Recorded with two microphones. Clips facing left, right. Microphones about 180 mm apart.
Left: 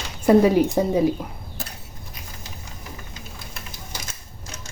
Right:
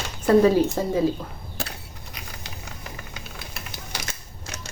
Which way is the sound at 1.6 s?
70° right (ahead or behind).